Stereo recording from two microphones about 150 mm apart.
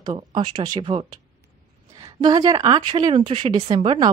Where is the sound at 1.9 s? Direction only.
25° right (ahead or behind).